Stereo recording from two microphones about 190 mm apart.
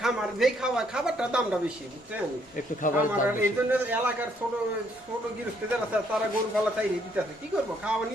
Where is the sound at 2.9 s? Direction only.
45° left (ahead or behind).